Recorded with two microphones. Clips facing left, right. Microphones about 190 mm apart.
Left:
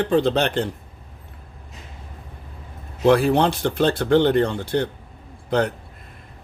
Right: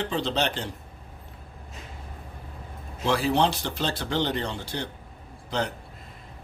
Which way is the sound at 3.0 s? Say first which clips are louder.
Left 7 dB; 55° left (ahead or behind).